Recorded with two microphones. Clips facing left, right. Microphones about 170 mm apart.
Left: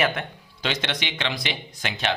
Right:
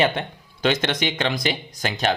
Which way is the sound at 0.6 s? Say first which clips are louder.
Right 7 dB; 50° right (ahead or behind).